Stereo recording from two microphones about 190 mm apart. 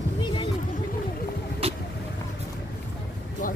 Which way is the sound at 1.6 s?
30° right (ahead or behind).